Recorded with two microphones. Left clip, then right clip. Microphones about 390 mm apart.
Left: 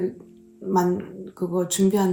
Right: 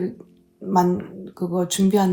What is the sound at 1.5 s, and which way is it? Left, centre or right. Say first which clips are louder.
Speech: right 1 dB; centre.